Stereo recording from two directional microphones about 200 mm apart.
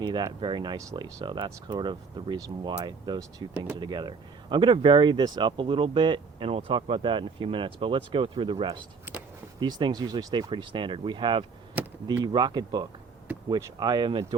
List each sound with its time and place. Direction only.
0.0 s speech: 20° right (ahead or behind)
9.1 s a sound: 10° right (ahead or behind)
9.6 s speech: 20° right (ahead or behind)